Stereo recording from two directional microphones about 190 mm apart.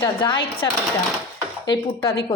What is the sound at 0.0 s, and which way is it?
Speech, 25° left (ahead or behind).